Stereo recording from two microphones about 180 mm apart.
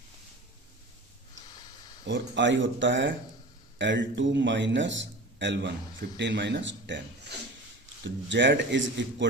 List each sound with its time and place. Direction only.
2.0 s a man's voice: 85° right